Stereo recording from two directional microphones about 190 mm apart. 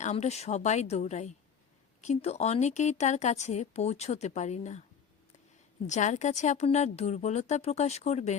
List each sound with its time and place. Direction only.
0.0 s a woman's voice: 35° left (ahead or behind)
5.9 s a woman's voice: 40° left (ahead or behind)